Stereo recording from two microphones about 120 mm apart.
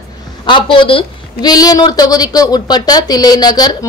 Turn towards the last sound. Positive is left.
turn(degrees=35)  # may be behind; listen again after turning